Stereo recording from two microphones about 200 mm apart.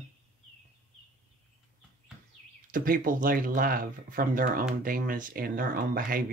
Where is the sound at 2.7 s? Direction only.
45° right (ahead or behind).